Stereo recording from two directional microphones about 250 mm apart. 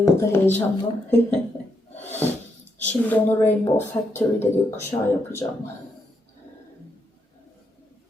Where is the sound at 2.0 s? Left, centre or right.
Centre.